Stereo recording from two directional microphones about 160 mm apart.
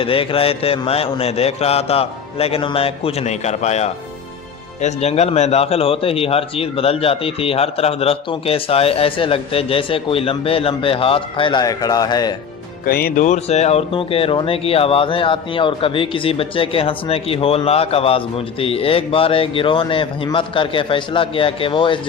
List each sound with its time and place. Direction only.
0.0 s speech: 35° left (ahead or behind)
12.8 s speech: 70° left (ahead or behind)
13.2 s speech: 45° left (ahead or behind)